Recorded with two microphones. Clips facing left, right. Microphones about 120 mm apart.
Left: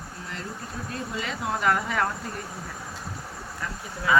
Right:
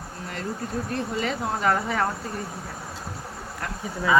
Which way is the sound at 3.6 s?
65° right (ahead or behind).